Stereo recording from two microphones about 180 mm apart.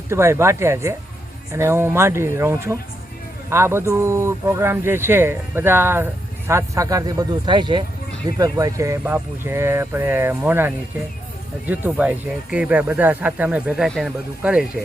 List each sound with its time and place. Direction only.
0.1 s speech: 15° right (ahead or behind)